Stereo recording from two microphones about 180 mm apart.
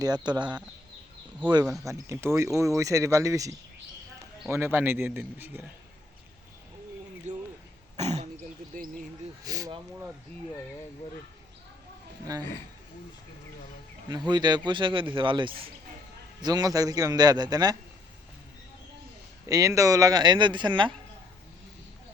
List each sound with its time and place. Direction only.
0.0 s a man's voice: 25° right (ahead or behind)
1.6 s speech: centre (ahead or behind)
1.9 s speech: 15° right (ahead or behind)
7.3 s a sound: 40° right (ahead or behind)
7.9 s throat clearing: 40° right (ahead or behind)
9.4 s a sound: 20° right (ahead or behind)
14.3 s a man's voice: 25° right (ahead or behind)
19.5 s a man's voice: 20° right (ahead or behind)